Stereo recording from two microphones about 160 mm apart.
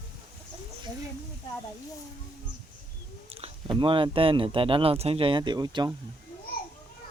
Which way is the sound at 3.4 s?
30° right (ahead or behind).